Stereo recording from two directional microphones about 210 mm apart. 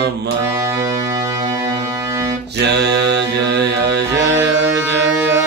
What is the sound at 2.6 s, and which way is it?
Mantra, 50° right (ahead or behind).